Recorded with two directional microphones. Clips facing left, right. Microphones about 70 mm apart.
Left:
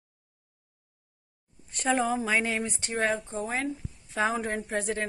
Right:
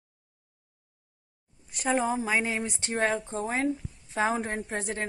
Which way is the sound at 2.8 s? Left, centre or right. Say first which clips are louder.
Right 2 dB; right.